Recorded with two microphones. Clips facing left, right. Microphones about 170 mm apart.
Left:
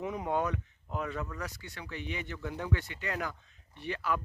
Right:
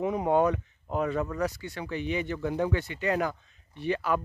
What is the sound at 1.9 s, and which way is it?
Speech, 90° right.